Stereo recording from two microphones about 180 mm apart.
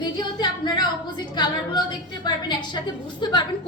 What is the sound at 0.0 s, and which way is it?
Speech, 25° left (ahead or behind).